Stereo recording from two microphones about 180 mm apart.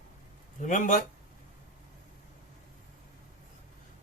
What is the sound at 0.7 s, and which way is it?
Speech, 45° left (ahead or behind).